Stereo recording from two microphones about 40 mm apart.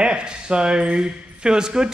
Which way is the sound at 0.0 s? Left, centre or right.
Right.